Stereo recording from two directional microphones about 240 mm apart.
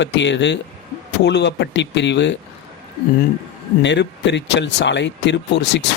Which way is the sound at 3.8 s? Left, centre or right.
Left.